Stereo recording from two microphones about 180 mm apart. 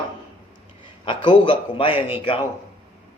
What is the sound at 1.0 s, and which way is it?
A man's voice, 25° left (ahead or behind).